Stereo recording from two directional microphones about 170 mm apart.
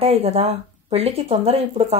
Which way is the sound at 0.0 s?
35° right (ahead or behind).